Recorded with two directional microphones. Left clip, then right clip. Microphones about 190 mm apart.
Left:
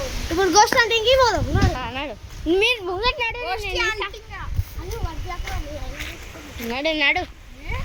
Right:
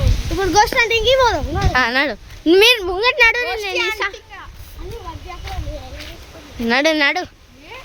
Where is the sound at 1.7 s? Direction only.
65° right (ahead or behind); by 4.1 s 50° right (ahead or behind).